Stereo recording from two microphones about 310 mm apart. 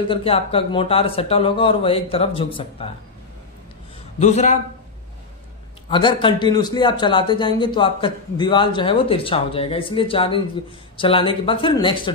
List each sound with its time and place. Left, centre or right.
0.1 s a man's voice: centre
4.2 s a man's voice: left
5.9 s a man's voice: centre